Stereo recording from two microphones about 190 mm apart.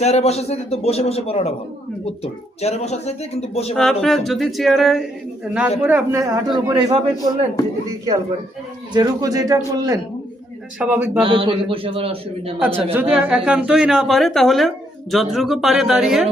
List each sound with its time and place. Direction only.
0.0 s a man's voice: 35° left (ahead or behind)
3.8 s a woman's voice: centre (ahead or behind)
11.2 s a man's voice: 25° right (ahead or behind)
12.6 s a woman's voice: 10° right (ahead or behind)